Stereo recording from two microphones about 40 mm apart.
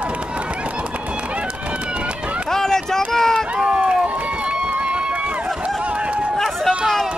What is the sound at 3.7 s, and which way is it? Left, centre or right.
Run, centre.